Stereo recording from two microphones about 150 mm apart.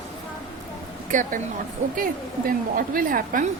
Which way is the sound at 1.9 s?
70° right (ahead or behind).